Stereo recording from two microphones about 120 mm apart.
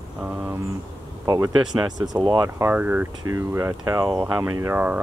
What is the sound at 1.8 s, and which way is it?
Speech, 35° right (ahead or behind).